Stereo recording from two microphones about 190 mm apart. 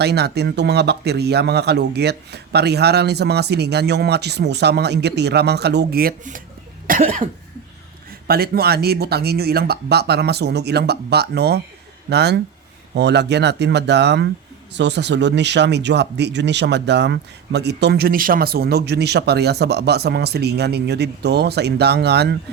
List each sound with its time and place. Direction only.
0.0 s speech: 60° right (ahead or behind)
6.8 s cough: 45° right (ahead or behind)
8.3 s speech: 55° right (ahead or behind)